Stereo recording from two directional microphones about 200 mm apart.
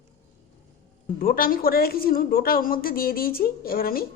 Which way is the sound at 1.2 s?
45° left (ahead or behind).